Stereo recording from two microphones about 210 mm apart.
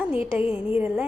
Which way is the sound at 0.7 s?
10° right (ahead or behind).